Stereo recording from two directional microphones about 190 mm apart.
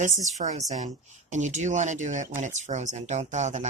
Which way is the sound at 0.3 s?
35° right (ahead or behind).